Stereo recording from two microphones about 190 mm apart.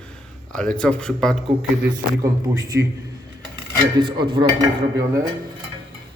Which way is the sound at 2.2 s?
15° right (ahead or behind).